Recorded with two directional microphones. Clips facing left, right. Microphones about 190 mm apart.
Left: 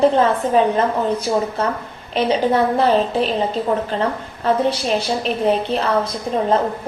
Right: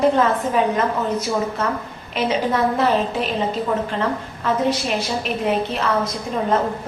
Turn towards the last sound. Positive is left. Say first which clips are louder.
# left 3 dB
turn(degrees=30)  # may be behind; listen again after turning